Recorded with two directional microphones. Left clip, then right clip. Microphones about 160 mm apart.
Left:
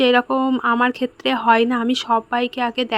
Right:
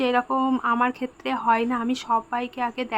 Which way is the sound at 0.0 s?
35° left (ahead or behind).